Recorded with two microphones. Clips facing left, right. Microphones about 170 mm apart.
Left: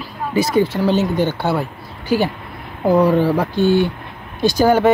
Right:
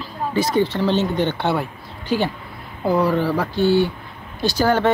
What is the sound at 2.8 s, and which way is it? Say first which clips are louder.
Speech: left 5 dB; 20° left (ahead or behind).